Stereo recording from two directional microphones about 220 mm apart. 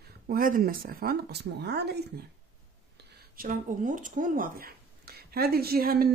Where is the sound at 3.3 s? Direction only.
35° right (ahead or behind).